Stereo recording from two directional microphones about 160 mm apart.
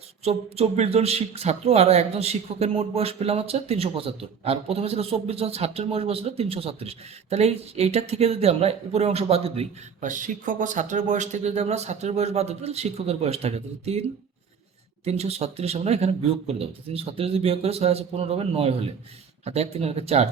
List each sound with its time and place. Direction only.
0.3 s a man's voice: 40° right (ahead or behind)
10.0 s speech: 55° right (ahead or behind)
15.0 s a man's voice: 40° right (ahead or behind)